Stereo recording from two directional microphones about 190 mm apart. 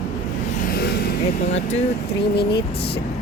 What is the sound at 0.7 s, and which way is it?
Vehicle, 55° left (ahead or behind).